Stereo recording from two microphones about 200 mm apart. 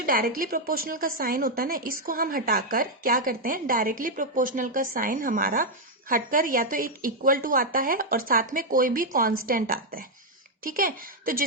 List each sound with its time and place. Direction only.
0.0 s a woman's voice: 45° right (ahead or behind)